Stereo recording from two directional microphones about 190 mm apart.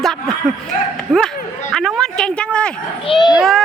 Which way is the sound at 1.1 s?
10° right (ahead or behind).